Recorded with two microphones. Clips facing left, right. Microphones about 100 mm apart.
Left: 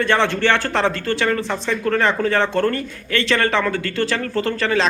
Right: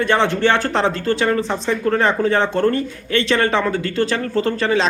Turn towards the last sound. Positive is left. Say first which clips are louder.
# right 2 dB
turn(degrees=-25)  # may be behind; listen again after turning